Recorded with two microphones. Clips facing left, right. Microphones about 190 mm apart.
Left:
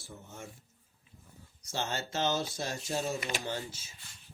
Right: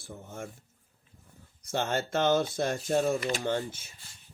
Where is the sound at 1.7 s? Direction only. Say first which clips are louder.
Right 6 dB; 55° right (ahead or behind).